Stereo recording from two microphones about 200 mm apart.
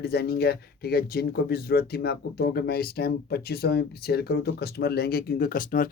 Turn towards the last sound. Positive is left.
turn(degrees=45)  # may be behind; listen again after turning